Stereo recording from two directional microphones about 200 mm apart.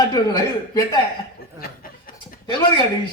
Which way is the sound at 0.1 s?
15° left (ahead or behind).